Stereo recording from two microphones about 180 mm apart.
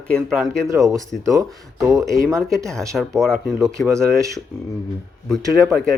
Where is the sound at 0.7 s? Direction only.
15° right (ahead or behind).